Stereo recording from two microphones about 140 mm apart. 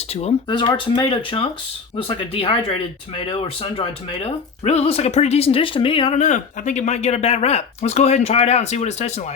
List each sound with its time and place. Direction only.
0.1 s speech: 50° left (ahead or behind)
0.4 s speech: 35° left (ahead or behind)
6.1 s speech: 60° left (ahead or behind)